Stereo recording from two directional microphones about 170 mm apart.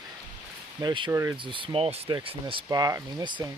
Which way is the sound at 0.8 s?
30° right (ahead or behind).